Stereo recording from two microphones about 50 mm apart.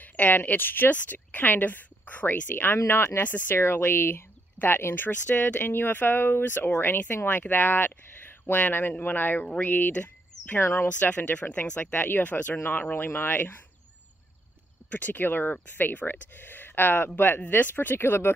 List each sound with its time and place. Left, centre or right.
0.0 s speech: left
2.5 s speech: left
3.2 s speech: left
3.5 s speech: left
10.6 s speech: left
11.0 s speech: left
11.8 s speech: left
12.5 s speech: left
14.9 s speech: left